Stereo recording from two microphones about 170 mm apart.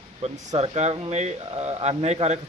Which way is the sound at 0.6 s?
40° right (ahead or behind).